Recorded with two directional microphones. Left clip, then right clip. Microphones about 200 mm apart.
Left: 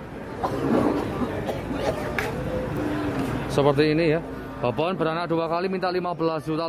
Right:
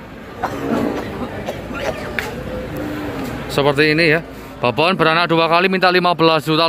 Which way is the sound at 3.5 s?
Centre (ahead or behind).